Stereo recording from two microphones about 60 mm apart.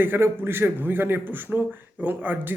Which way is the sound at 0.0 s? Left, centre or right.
Right.